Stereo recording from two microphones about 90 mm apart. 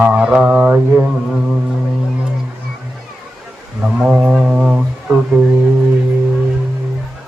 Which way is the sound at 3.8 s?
10° right (ahead or behind).